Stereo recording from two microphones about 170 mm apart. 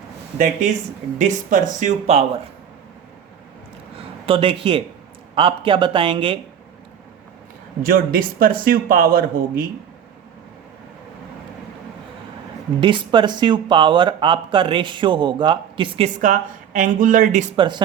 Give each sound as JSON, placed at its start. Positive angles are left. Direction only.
{"t": 0.3, "sound": "speech", "side_deg": -50}
{"t": 3.9, "sound": "a sound", "side_deg": -30}
{"t": 5.3, "sound": "speech", "side_deg": -30}
{"t": 7.8, "sound": "a man's voice", "side_deg": -55}
{"t": 12.8, "sound": "speech", "side_deg": -30}
{"t": 16.1, "sound": "speech", "side_deg": -50}
{"t": 17.6, "sound": "speech", "side_deg": -25}